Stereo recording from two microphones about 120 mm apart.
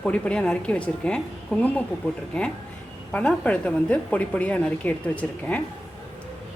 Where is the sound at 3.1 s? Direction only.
10° left (ahead or behind).